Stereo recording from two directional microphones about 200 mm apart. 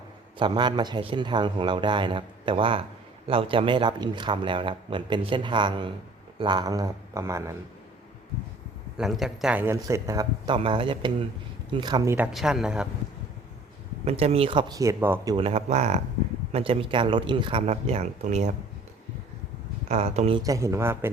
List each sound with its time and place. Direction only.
0.3 s speech: 25° right (ahead or behind)
9.0 s speech: centre (ahead or behind); by 12.1 s 20° right (ahead or behind)
12.1 s speech: 5° right (ahead or behind)
14.0 s speech: 30° right (ahead or behind); by 15.4 s 15° right (ahead or behind)
15.4 s speech: 30° right (ahead or behind)
19.9 s speech: 35° right (ahead or behind)
20.4 s speech: 15° right (ahead or behind)